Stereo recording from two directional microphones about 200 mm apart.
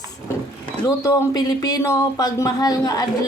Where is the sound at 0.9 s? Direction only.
15° left (ahead or behind).